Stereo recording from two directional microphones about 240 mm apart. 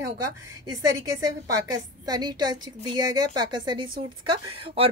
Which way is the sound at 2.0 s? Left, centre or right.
Centre.